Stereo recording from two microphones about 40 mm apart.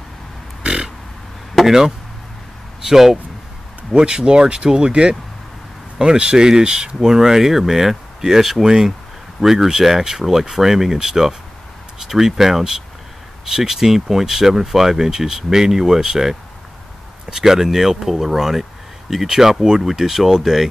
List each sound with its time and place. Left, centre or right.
1.7 s speech: centre
3.9 s speech: right